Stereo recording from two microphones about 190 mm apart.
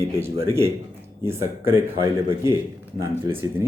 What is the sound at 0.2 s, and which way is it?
A man's voice, 15° right (ahead or behind).